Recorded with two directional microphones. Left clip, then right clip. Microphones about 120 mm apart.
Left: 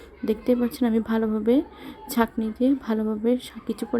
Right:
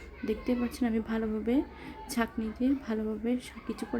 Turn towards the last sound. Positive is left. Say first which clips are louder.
# left 8 dB
turn(degrees=35)  # may be behind; listen again after turning